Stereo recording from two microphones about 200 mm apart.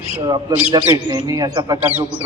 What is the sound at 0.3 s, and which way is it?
Speech, 20° right (ahead or behind).